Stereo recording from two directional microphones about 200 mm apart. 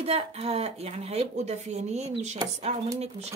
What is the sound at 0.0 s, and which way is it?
A woman's voice, 30° right (ahead or behind).